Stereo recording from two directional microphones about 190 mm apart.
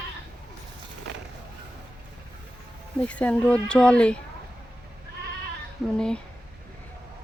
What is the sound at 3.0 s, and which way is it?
Speech, 5° left (ahead or behind).